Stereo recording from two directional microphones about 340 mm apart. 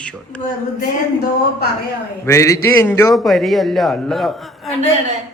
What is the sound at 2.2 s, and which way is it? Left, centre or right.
A man's voice, centre.